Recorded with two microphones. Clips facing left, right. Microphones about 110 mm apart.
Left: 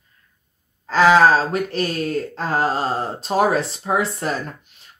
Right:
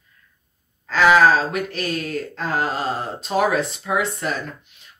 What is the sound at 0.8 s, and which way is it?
Speech, 35° left (ahead or behind).